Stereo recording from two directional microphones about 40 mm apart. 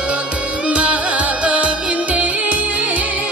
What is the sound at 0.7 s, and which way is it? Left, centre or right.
Music, right.